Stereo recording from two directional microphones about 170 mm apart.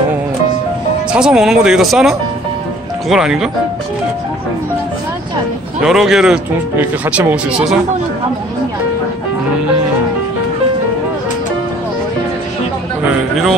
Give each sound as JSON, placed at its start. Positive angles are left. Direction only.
{"t": 1.1, "sound": "speech", "side_deg": -5}
{"t": 5.8, "sound": "speech", "side_deg": -5}